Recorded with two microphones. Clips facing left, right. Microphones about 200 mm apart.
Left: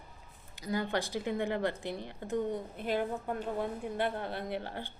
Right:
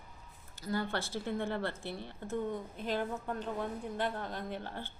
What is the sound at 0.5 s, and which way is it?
A woman's voice, 15° left (ahead or behind).